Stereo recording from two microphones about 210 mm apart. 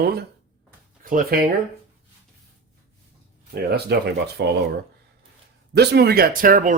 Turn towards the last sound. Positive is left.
turn(degrees=-40)  # may be behind; listen again after turning